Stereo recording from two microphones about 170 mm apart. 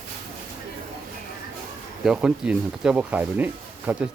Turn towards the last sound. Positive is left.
turn(degrees=-10)  # may be behind; listen again after turning